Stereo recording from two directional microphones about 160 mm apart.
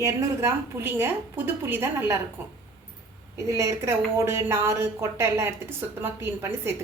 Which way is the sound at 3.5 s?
15° right (ahead or behind).